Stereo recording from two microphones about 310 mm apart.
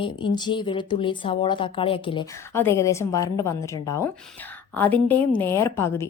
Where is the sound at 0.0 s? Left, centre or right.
Centre.